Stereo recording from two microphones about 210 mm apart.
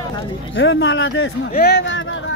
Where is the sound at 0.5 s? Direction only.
65° left (ahead or behind).